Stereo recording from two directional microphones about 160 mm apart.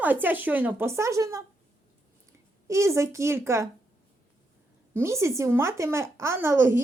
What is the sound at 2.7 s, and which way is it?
Speech, 20° right (ahead or behind).